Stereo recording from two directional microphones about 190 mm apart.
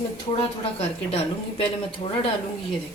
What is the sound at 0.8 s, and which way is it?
Speech, 30° left (ahead or behind).